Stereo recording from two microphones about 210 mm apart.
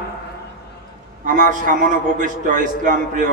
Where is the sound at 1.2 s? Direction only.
40° right (ahead or behind).